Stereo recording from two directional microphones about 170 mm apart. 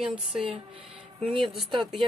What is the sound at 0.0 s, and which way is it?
Speech, 5° right (ahead or behind).